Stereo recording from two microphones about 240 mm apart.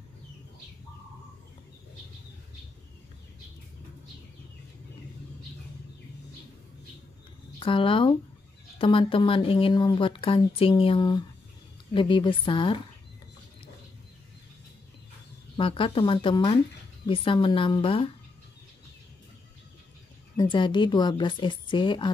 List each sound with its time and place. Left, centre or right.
7.5 s speech: left
15.5 s speech: left
20.3 s speech: centre